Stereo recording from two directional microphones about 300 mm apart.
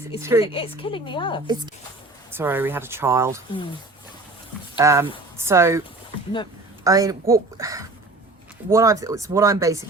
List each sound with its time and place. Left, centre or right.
0.2 s speech: centre
0.4 s a woman's voice: centre
2.3 s speech: centre
4.8 s speech: centre
6.8 s speech: centre